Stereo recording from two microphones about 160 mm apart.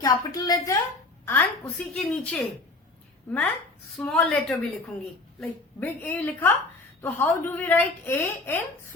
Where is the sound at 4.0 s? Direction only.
5° left (ahead or behind).